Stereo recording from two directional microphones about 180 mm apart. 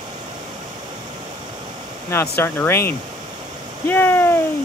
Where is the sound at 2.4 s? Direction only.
15° left (ahead or behind).